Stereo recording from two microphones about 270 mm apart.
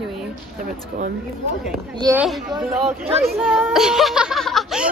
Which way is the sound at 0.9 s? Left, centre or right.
Right.